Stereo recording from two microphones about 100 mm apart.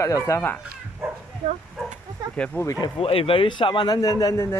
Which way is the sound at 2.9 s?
70° left (ahead or behind).